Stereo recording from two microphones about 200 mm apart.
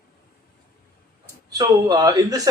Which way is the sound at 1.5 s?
20° right (ahead or behind).